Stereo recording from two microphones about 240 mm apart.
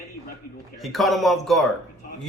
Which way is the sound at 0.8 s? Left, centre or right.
Centre.